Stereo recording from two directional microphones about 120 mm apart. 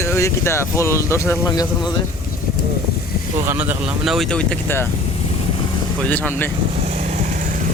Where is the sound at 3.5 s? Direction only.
15° right (ahead or behind).